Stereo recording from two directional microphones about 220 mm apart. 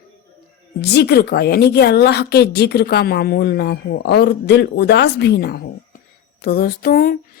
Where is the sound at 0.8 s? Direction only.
50° left (ahead or behind).